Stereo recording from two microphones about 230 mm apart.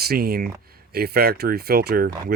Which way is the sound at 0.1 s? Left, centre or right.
Right.